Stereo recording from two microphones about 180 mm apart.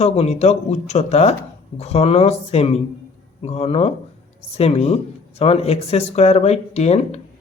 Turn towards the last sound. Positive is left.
turn(degrees=35)  # may be behind; listen again after turning